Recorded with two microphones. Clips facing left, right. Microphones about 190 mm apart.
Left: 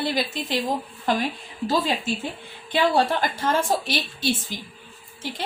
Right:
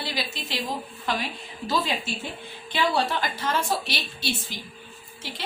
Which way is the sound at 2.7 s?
50° left (ahead or behind).